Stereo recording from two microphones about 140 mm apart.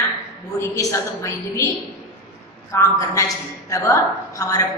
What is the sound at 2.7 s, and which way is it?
A woman's voice, 20° left (ahead or behind).